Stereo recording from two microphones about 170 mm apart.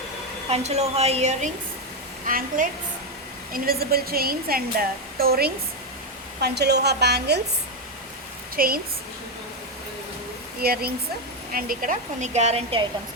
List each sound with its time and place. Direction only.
0.5 s a woman's voice: 40° right (ahead or behind)
2.2 s a woman's voice: 55° right (ahead or behind)
6.4 s a woman's voice: 75° right (ahead or behind)
8.5 s a woman's voice: 60° right (ahead or behind)
10.6 s a woman's voice: 65° right (ahead or behind); by 12.8 s 40° right (ahead or behind)